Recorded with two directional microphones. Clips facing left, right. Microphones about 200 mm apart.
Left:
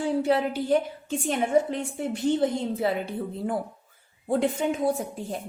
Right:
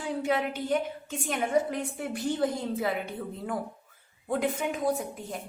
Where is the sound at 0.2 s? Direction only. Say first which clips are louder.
Left 5 dB; 30° left (ahead or behind).